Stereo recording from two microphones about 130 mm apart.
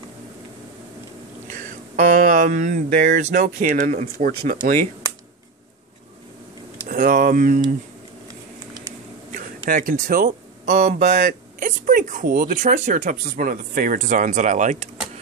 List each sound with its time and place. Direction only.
1.5 s speech: 85° right
6.9 s speech: 90° right
9.7 s speech: 90° right; by 14.9 s 65° right (ahead or behind)